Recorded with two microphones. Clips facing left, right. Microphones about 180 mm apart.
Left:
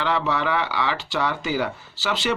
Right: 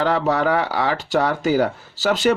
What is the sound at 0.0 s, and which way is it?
Speech, 40° right (ahead or behind).